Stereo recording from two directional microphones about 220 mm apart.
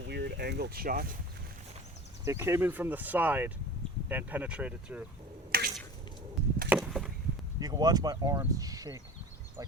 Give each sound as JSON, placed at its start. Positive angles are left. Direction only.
{"t": 0.0, "sound": "speech", "side_deg": -50}
{"t": 2.2, "sound": "speech", "side_deg": -10}
{"t": 5.5, "sound": "drip", "side_deg": -40}
{"t": 6.7, "sound": "chop", "side_deg": -5}
{"t": 7.6, "sound": "speech", "side_deg": -15}